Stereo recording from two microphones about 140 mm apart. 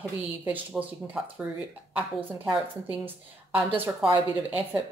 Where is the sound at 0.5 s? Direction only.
10° right (ahead or behind).